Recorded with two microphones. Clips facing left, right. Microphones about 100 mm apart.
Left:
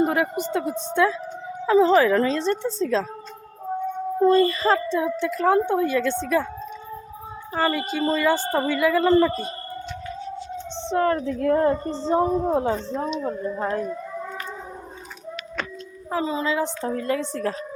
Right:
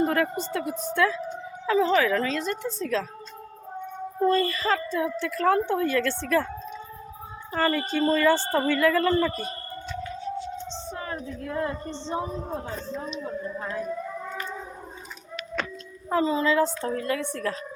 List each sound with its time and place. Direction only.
0.0 s speech: 15° left (ahead or behind)
0.6 s a woman's voice: 30° left (ahead or behind)
4.2 s a woman's voice: 25° left (ahead or behind)
7.5 s a woman's voice: 15° left (ahead or behind)
10.8 s a woman's voice: 65° left (ahead or behind)
11.5 s speech: 40° left (ahead or behind)
12.5 s a woman's voice: 85° left
13.0 s a woman's voice: 45° left (ahead or behind)
16.0 s speech: 15° left (ahead or behind)
16.8 s a woman's voice: 30° left (ahead or behind)